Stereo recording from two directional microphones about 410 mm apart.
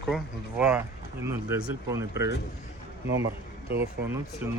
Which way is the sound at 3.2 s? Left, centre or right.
Right.